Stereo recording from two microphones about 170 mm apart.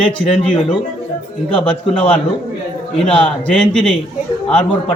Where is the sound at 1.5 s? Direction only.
30° left (ahead or behind).